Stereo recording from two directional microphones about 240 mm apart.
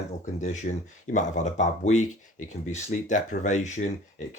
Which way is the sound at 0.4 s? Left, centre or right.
Left.